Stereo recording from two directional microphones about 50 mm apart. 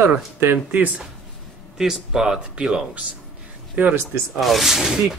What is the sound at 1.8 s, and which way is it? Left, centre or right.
Speech, centre.